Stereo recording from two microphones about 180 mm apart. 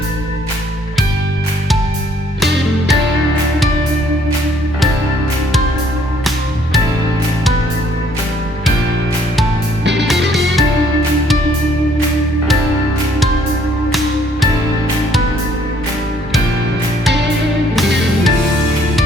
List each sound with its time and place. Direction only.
2.4 s music: centre (ahead or behind)
9.8 s music: 80° right
10.1 s music: centre (ahead or behind)
17.7 s music: centre (ahead or behind)